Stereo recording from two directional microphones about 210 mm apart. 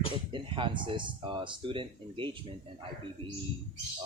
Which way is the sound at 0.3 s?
25° right (ahead or behind).